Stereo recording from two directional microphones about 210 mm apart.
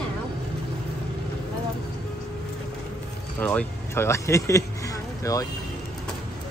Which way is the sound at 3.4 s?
10° left (ahead or behind).